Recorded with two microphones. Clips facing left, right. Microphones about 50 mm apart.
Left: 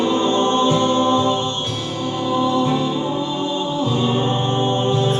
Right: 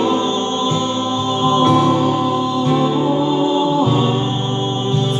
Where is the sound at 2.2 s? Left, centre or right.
Centre.